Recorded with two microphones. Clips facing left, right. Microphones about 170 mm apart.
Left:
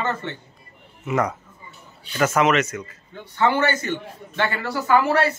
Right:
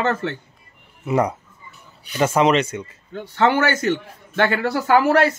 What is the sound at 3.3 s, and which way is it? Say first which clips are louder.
Speech: right 2 dB; 75° right (ahead or behind).